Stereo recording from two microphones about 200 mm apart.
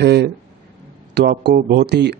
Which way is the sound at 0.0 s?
55° right (ahead or behind).